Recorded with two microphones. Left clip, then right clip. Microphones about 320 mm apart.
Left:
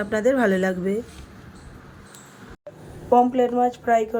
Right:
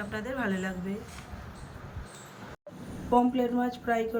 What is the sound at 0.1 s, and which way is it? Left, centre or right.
Speech, centre.